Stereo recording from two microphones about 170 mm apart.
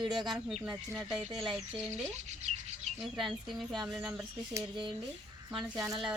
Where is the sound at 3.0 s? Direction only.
Centre (ahead or behind).